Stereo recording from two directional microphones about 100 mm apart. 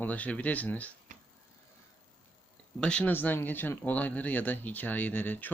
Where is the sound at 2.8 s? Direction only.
10° left (ahead or behind).